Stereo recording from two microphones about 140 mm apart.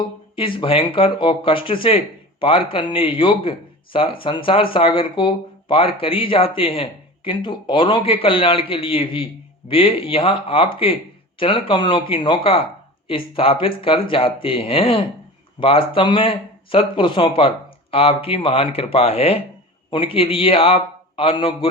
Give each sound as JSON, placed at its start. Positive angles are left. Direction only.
{"t": 0.0, "sound": "speech", "side_deg": 35}